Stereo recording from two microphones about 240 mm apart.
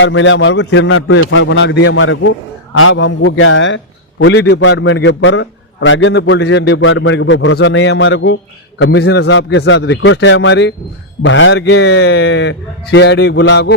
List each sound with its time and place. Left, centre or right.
0.0 s a man's voice: left